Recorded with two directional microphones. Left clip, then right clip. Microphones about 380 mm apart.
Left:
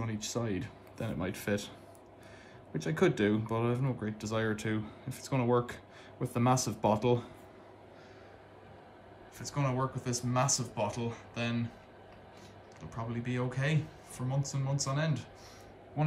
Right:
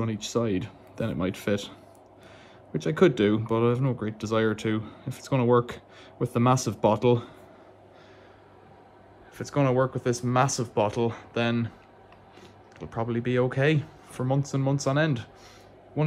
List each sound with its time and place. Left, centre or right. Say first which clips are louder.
0.0 s speech: right 9 dB; centre
2.7 s speech: right 8 dB; centre
9.4 s speech: right 10 dB; centre
12.7 s speech: right 11 dB; centre